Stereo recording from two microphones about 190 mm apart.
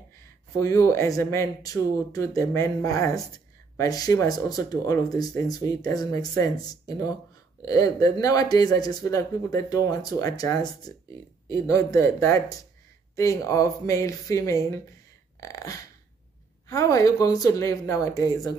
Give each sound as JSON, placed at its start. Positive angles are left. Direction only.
{"t": 0.6, "sound": "speech", "side_deg": 15}
{"t": 15.4, "sound": "beatboxing", "side_deg": 15}
{"t": 16.6, "sound": "speech", "side_deg": 15}